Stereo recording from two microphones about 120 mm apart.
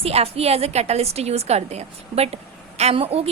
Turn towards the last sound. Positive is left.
turn(degrees=-55)  # may be behind; listen again after turning